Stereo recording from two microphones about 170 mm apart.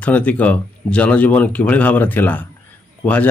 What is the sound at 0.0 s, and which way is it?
Speech, 10° left (ahead or behind).